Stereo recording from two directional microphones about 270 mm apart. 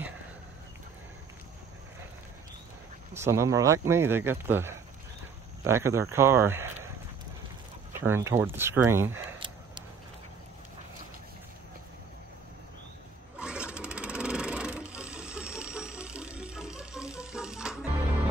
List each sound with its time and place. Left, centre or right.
3.2 s speech: centre
8.0 s speech: centre
13.4 s a sound: centre